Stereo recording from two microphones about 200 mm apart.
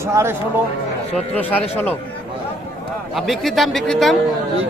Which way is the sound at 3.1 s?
Centre (ahead or behind).